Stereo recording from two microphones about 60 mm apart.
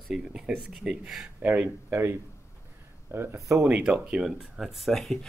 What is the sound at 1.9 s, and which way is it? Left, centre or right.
A man's voice, right.